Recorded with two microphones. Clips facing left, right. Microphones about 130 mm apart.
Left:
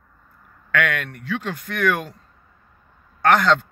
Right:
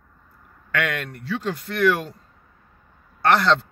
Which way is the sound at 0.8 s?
35° right (ahead or behind).